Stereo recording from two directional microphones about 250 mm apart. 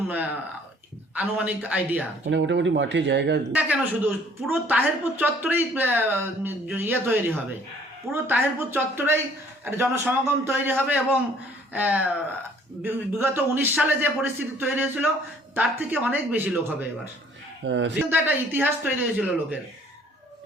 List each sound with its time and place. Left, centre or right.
0.1 s a woman's voice: centre
2.3 s speech: right
3.5 s a woman's voice: centre
17.7 s speech: right
18.1 s a woman's voice: centre